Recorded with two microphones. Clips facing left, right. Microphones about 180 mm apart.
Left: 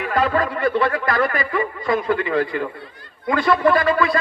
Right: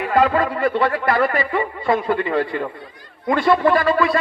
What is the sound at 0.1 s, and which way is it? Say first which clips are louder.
A man's voice: right 3 dB; 30° right (ahead or behind).